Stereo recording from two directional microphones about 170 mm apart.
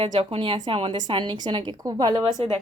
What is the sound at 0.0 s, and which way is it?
A woman's voice, 30° right (ahead or behind).